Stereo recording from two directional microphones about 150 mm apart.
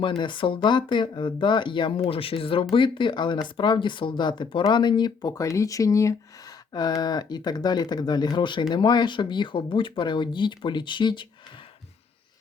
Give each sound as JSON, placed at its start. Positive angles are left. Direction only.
{"t": 0.0, "sound": "speech", "side_deg": 30}